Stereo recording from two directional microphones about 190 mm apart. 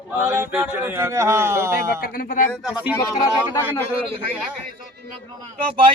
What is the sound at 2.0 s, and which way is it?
Speech, 50° left (ahead or behind).